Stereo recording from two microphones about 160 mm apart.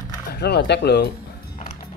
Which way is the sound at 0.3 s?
90° left.